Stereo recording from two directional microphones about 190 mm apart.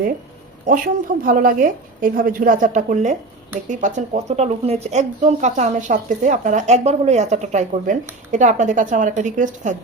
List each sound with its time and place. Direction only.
0.6 s a woman's voice: 45° right (ahead or behind)